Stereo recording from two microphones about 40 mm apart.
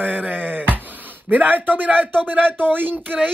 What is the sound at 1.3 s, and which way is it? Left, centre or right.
A man's voice, right.